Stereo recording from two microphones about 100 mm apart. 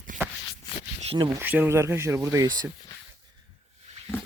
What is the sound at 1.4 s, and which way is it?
Speech, 15° right (ahead or behind).